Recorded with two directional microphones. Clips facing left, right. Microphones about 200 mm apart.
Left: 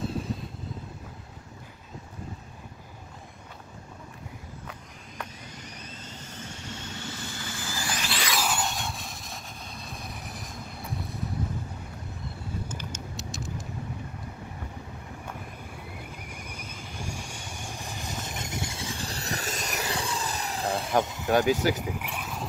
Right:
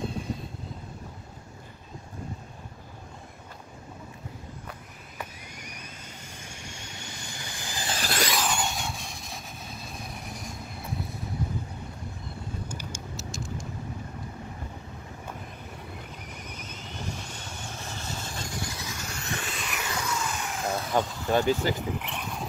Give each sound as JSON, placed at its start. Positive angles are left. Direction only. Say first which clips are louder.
{"t": 0.0, "sound": "vehicle", "louder": "left 1 dB", "side_deg": 0}
{"t": 4.6, "sound": "vehicle", "louder": "even", "side_deg": -5}
{"t": 7.9, "sound": "a sound", "louder": "right 5 dB", "side_deg": -40}
{"t": 8.4, "sound": "vehicle", "louder": "even", "side_deg": 5}
{"t": 13.1, "sound": "vehicle", "louder": "even", "side_deg": 0}
{"t": 16.3, "sound": "vehicle", "louder": "even", "side_deg": 10}
{"t": 21.0, "sound": "vehicle", "louder": "left 1 dB", "side_deg": 20}